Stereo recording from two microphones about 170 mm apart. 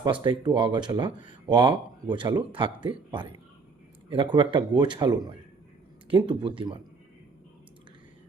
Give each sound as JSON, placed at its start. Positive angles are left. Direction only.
{"t": 0.0, "sound": "speech", "side_deg": -25}